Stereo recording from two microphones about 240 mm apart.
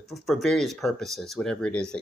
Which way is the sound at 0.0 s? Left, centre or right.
Centre.